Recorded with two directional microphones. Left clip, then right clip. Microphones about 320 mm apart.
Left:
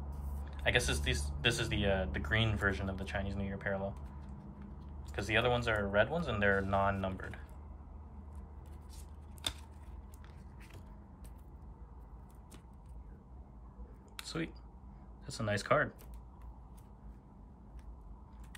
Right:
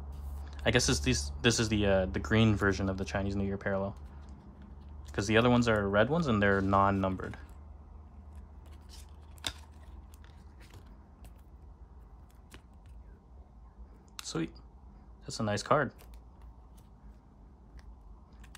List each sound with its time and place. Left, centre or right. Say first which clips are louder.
0.5 s speech: right 3 dB; centre
5.0 s speech: right 5 dB; centre
14.1 s a sound: right 4 dB; centre
15.2 s speech: right 3 dB; centre